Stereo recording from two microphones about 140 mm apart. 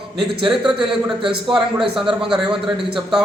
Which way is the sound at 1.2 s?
40° right (ahead or behind).